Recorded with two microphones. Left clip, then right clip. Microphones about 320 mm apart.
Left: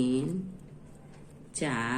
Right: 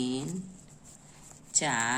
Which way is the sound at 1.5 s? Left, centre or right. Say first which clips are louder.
Right 3 dB; right.